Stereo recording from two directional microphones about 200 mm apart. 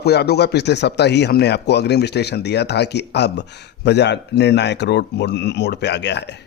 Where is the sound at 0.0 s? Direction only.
55° left (ahead or behind).